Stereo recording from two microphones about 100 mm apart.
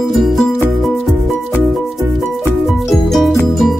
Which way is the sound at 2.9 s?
Centre (ahead or behind).